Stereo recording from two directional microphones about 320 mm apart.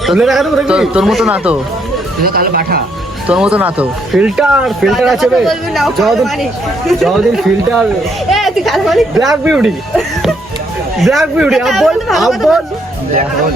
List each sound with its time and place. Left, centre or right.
0.0 s speech: centre
2.2 s speech: right
3.2 s a woman's voice: centre